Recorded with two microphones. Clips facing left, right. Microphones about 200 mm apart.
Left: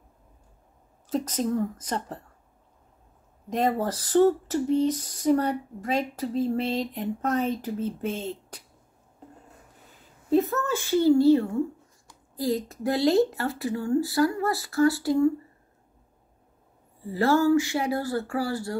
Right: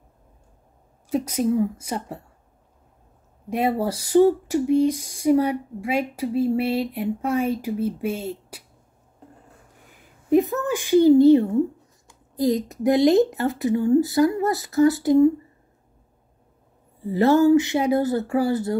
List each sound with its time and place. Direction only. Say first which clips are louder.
1.1 s speech: right 5 dB; 10° right (ahead or behind)
3.4 s speech: right 3 dB; 10° right (ahead or behind)
10.3 s speech: right 4 dB; 15° right (ahead or behind)
17.1 s speech: right 5 dB; 20° right (ahead or behind)